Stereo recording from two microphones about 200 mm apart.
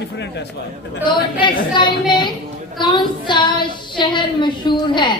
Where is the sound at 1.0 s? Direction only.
25° left (ahead or behind).